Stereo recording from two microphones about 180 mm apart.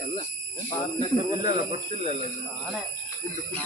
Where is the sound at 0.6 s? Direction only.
20° left (ahead or behind).